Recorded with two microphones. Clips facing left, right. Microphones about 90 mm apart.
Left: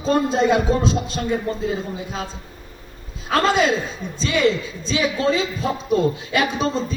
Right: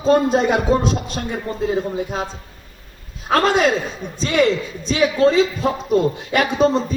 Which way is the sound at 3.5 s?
50° right (ahead or behind).